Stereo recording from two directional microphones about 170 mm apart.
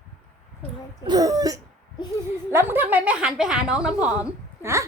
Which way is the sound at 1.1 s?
20° right (ahead or behind).